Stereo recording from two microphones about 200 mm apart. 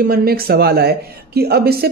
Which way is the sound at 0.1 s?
50° right (ahead or behind).